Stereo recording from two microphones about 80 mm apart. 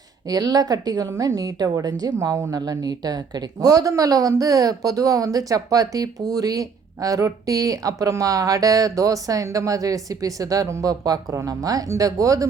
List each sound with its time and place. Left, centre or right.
0.3 s a woman's voice: right
2.6 s a woman's voice: right